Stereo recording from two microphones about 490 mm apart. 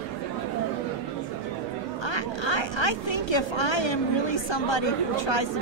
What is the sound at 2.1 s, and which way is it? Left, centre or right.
Speech, left.